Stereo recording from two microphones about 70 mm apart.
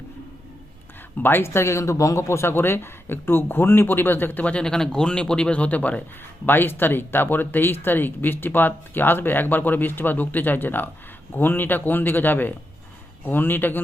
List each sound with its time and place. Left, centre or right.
1.2 s speech: left
6.4 s speech: left